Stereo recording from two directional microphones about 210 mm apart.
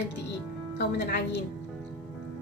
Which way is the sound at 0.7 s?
55° left (ahead or behind).